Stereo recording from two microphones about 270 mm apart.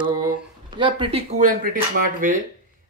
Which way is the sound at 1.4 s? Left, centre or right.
Right.